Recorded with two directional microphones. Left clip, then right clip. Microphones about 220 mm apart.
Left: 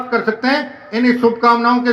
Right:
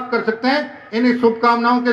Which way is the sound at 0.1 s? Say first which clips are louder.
Left 2 dB; 45° left (ahead or behind).